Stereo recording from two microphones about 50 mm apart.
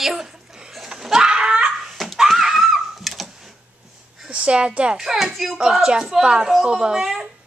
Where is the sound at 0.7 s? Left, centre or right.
Centre.